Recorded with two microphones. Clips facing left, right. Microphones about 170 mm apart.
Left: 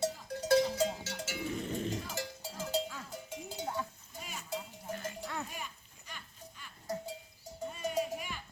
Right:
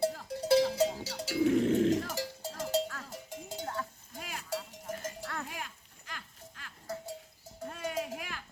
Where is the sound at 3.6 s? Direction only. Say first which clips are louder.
Left 1 dB; 5° left (ahead or behind).